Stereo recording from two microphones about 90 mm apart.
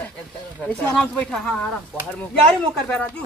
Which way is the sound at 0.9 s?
10° left (ahead or behind).